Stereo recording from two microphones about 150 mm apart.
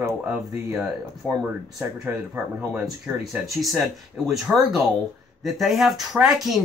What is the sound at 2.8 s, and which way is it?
Speech, 5° right (ahead or behind).